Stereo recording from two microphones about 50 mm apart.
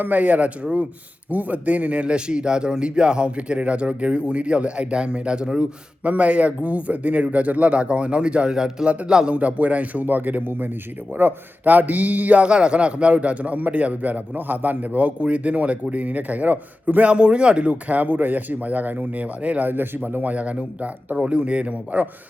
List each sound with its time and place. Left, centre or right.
0.0 s a man's voice: right; by 9.3 s centre
9.3 s a man's voice: right
11.6 s a man's voice: right
17.1 s a man's voice: right
19.6 s a man's voice: right
20.3 s a man's voice: right